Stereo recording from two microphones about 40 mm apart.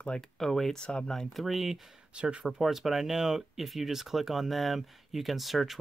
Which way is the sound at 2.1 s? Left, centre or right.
Right.